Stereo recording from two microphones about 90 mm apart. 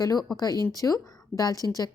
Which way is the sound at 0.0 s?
45° left (ahead or behind).